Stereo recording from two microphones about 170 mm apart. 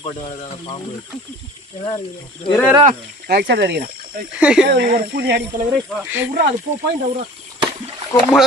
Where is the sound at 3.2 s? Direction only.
70° right (ahead or behind).